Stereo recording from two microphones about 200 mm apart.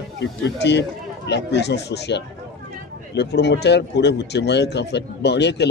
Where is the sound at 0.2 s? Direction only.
60° left (ahead or behind).